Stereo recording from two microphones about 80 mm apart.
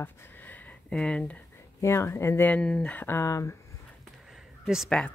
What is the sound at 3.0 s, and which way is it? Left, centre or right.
Speech, left.